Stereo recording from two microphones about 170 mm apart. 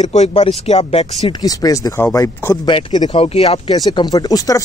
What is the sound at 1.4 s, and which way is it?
Speech, 20° left (ahead or behind).